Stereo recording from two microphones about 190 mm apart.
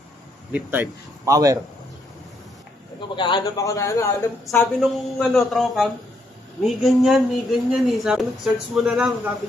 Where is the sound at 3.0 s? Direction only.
25° left (ahead or behind).